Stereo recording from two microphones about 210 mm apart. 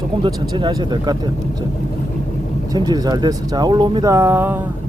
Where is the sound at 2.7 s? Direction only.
20° right (ahead or behind).